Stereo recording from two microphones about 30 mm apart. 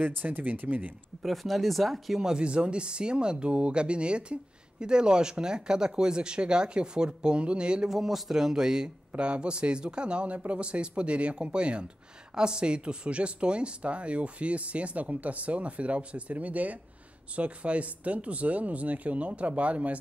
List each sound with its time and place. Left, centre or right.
0.0 s speech: right
1.2 s speech: centre
2.3 s speech: right
7.9 s a man's voice: centre
9.2 s speech: right
16.3 s speech: right